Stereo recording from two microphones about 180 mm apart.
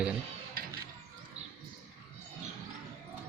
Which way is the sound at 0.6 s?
55° right (ahead or behind).